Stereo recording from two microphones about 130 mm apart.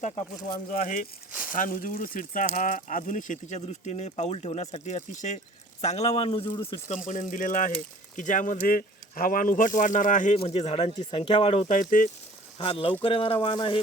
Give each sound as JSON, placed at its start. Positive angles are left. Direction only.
{"t": 0.5, "sound": "speech", "side_deg": 90}
{"t": 1.3, "sound": "a sound", "side_deg": -10}
{"t": 1.5, "sound": "speech", "side_deg": 90}
{"t": 5.8, "sound": "speech", "side_deg": 55}
{"t": 7.1, "sound": "speech", "side_deg": 80}
{"t": 10.3, "sound": "speech", "side_deg": 50}
{"t": 11.7, "sound": "speech", "side_deg": 90}
{"t": 12.5, "sound": "speech", "side_deg": 50}